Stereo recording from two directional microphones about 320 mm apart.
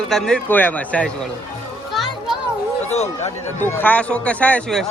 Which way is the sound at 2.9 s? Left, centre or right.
Left.